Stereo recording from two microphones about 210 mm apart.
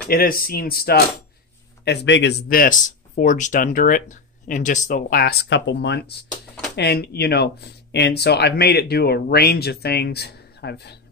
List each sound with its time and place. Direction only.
0.1 s speech: 45° left (ahead or behind)
1.9 s speech: 55° left (ahead or behind)